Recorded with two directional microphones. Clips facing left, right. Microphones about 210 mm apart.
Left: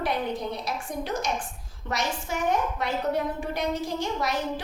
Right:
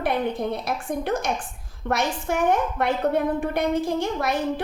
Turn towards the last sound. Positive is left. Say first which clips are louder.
# right 4 dB
turn(degrees=-55)  # may be behind; listen again after turning